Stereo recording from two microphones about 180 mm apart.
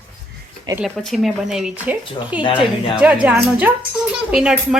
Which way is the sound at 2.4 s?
25° left (ahead or behind).